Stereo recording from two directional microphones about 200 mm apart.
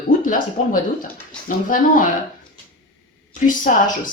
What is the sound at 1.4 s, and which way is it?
Speech, 45° left (ahead or behind).